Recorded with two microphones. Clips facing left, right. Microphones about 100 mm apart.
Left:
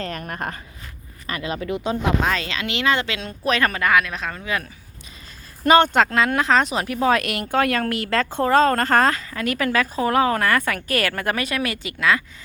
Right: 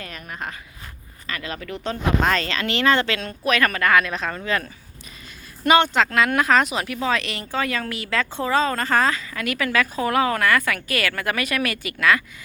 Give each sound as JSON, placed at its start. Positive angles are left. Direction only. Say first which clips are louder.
{"t": 0.0, "sound": "speech", "louder": "left 5 dB", "side_deg": 45}
{"t": 1.3, "sound": "speech", "louder": "left 5 dB", "side_deg": 25}
{"t": 3.9, "sound": "speech", "louder": "right 1 dB", "side_deg": 0}
{"t": 5.6, "sound": "speech", "louder": "left 2 dB", "side_deg": 45}
{"t": 6.1, "sound": "speech", "louder": "even", "side_deg": 30}
{"t": 6.7, "sound": "a woman's voice", "louder": "left 4 dB", "side_deg": 40}